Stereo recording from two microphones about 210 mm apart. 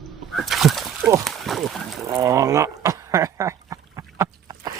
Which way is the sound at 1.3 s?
Centre (ahead or behind).